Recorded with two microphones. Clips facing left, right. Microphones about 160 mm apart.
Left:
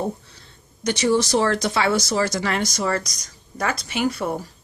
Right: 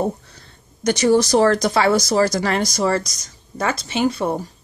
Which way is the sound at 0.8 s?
45° right (ahead or behind).